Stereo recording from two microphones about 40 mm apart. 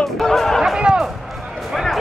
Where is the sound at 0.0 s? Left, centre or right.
Centre.